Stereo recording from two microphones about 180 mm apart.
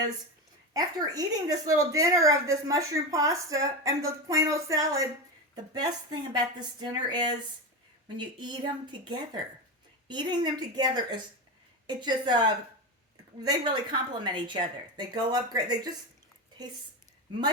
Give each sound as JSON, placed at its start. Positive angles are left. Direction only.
{"t": 0.7, "sound": "a woman's voice", "side_deg": -20}
{"t": 13.4, "sound": "a woman's voice", "side_deg": -25}